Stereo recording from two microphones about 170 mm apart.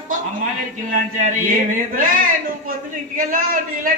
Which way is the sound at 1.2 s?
50° right (ahead or behind).